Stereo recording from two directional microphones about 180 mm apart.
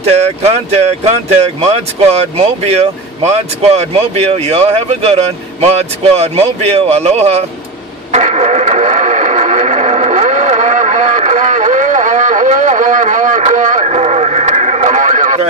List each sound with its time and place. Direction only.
0.0 s speech: 35° right (ahead or behind)
8.1 s radio: 40° right (ahead or behind)